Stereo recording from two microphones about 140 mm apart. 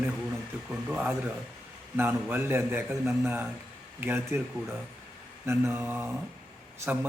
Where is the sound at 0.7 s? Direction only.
10° right (ahead or behind).